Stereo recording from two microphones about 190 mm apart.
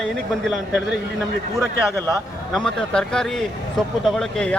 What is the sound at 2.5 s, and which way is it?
Speech, 5° left (ahead or behind).